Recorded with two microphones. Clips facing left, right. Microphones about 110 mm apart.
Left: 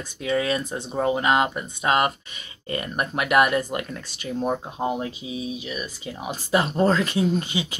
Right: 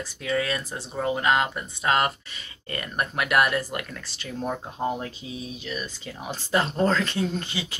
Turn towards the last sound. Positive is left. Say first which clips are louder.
# left 6 dB
turn(degrees=15)  # may be behind; listen again after turning